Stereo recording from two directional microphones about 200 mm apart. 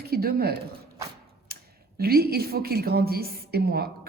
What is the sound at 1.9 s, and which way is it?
A woman's voice, 50° right (ahead or behind).